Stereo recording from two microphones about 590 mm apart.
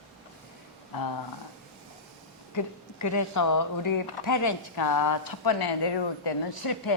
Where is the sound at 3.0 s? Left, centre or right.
Left.